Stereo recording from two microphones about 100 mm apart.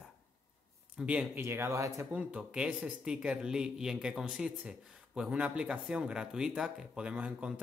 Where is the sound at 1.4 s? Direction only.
25° right (ahead or behind).